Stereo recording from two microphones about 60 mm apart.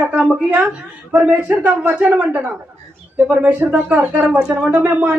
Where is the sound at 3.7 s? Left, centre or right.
Centre.